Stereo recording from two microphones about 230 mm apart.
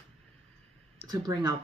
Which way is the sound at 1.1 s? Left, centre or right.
Centre.